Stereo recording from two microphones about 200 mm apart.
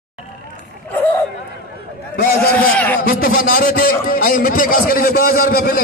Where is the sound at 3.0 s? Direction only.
45° left (ahead or behind).